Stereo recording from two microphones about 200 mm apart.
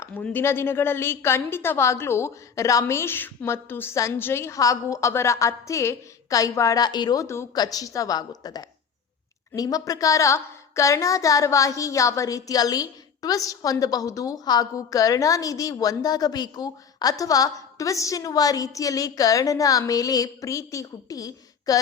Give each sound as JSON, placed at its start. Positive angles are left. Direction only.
{"t": 0.0, "sound": "a woman's voice", "side_deg": 5}